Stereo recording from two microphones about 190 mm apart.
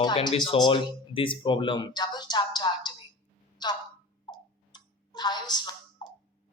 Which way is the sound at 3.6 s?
20° left (ahead or behind).